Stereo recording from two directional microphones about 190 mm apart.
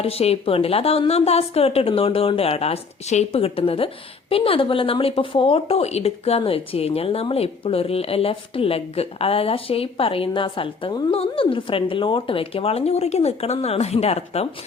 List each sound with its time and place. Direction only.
0.0 s speech: 30° left (ahead or behind)